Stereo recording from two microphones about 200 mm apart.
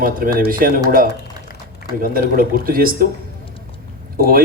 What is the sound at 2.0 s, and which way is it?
A man's voice, 45° right (ahead or behind).